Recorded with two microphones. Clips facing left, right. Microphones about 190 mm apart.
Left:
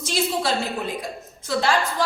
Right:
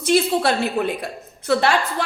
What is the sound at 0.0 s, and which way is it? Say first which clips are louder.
A woman's voice: right 6 dB; 60° right (ahead or behind).